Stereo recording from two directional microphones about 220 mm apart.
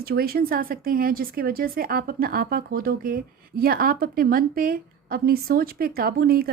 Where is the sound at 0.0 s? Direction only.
45° right (ahead or behind).